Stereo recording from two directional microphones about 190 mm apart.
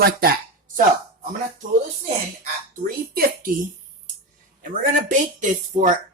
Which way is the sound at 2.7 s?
45° right (ahead or behind).